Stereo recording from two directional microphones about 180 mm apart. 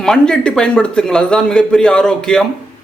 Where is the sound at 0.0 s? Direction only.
5° left (ahead or behind).